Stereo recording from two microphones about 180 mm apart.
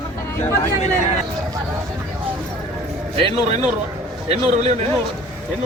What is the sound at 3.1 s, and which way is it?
Speech, 30° right (ahead or behind).